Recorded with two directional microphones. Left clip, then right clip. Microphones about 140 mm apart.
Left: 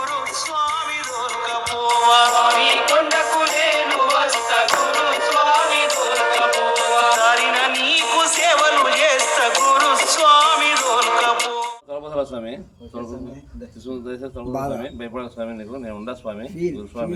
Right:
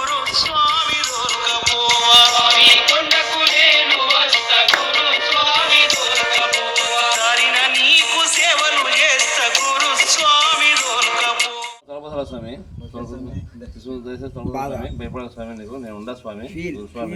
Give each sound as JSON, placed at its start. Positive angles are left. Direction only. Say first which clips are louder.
{"t": 0.0, "sound": "music", "louder": "right 5 dB", "side_deg": 20}
{"t": 14.8, "sound": "speech", "louder": "left 1 dB", "side_deg": 0}